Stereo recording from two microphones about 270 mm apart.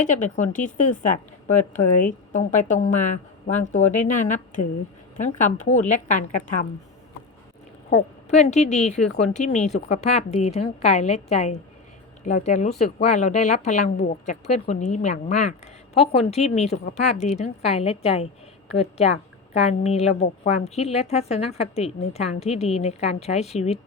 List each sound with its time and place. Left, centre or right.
0.0 s a woman's voice: left
8.3 s a woman's voice: left